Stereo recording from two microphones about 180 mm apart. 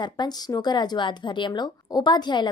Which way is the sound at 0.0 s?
25° left (ahead or behind).